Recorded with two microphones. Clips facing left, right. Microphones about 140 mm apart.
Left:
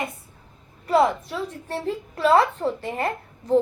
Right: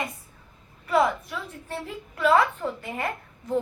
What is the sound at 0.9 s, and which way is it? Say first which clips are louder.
A woman's voice: left 3 dB; 35° left (ahead or behind).